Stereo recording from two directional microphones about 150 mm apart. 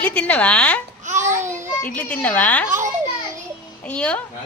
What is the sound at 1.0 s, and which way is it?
Babbling, 50° right (ahead or behind).